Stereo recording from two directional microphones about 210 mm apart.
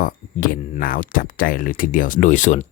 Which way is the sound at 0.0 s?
40° left (ahead or behind).